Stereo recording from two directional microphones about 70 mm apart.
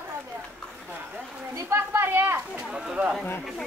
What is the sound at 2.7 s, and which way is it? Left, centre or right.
Speech, centre.